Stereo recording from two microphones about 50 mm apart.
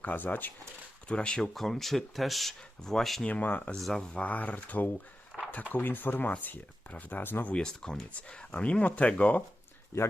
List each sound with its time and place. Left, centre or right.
0.0 s speech: left
1.0 s speech: left
1.4 s speech: centre
3.2 s speech: left
3.8 s speech: centre
4.1 s speech: left
5.3 s a sound: centre
5.7 s speech: left
7.6 s speech: centre; by 9.4 s left